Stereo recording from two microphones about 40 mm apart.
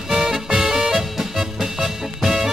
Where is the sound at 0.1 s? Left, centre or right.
Centre.